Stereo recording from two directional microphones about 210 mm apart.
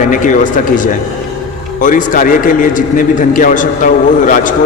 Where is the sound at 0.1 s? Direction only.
40° left (ahead or behind).